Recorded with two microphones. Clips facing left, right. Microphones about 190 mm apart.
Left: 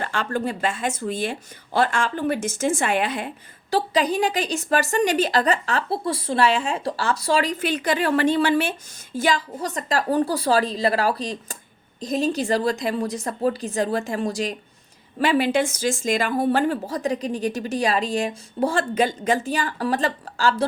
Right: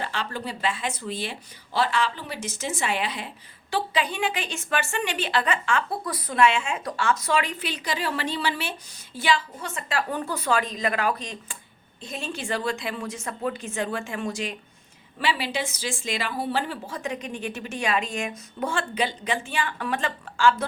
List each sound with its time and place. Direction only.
0.0 s speech: 50° left (ahead or behind)
3.7 s speech: 40° left (ahead or behind)
7.6 s speech: 50° left (ahead or behind); by 14.5 s 35° left (ahead or behind)
15.2 s speech: 50° left (ahead or behind)